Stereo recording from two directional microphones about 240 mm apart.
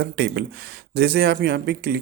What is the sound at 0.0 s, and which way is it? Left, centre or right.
Speech, right.